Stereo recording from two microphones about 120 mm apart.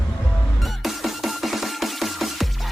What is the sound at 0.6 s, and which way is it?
Music, centre (ahead or behind).